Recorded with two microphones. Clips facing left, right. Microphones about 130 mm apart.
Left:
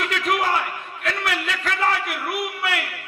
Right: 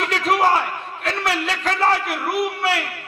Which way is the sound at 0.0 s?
30° right (ahead or behind).